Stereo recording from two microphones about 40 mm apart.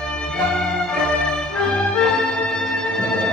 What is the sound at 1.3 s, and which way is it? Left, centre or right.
Music, centre.